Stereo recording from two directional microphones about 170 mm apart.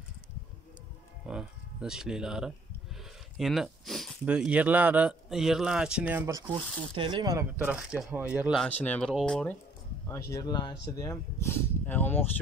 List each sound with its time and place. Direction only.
1.2 s speech: 5° right (ahead or behind); by 7.4 s 25° right (ahead or behind)
7.6 s speech: 5° right (ahead or behind)
10.3 s speech: 25° left (ahead or behind)